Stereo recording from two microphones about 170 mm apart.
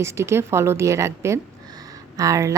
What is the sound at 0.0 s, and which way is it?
A woman's voice, 15° right (ahead or behind).